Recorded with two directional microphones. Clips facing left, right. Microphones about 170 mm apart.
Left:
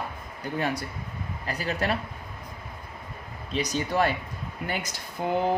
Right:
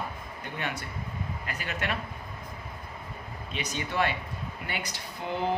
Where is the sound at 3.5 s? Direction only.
40° left (ahead or behind).